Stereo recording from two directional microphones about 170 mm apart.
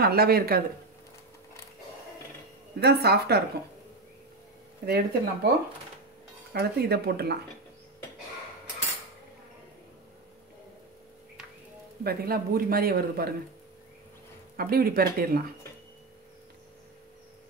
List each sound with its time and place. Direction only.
0.0 s a man's voice: 65° right (ahead or behind)
2.8 s speech: 70° right (ahead or behind)
4.8 s speech: 65° right (ahead or behind)
6.5 s speech: 70° right (ahead or behind)
12.0 s a man's voice: 65° right (ahead or behind)
14.6 s a man's voice: 60° right (ahead or behind)